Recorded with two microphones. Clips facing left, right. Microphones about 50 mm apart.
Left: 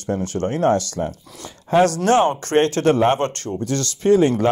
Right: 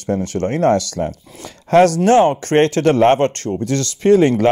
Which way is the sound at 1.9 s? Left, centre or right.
Right.